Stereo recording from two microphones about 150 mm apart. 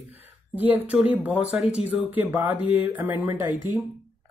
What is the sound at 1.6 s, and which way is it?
Speech, 45° left (ahead or behind).